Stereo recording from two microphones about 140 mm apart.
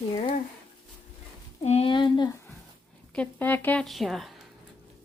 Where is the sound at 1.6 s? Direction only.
45° left (ahead or behind).